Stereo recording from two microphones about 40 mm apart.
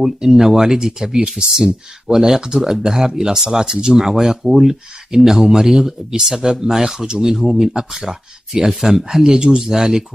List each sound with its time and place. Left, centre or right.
0.0 s speech: centre